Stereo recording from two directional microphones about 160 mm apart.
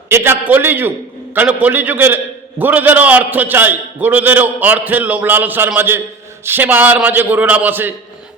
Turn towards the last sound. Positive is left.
turn(degrees=-10)  # may be behind; listen again after turning